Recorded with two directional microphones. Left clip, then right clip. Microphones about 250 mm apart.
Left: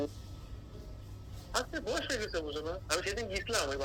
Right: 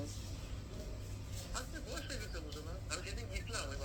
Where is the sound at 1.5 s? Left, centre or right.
Left.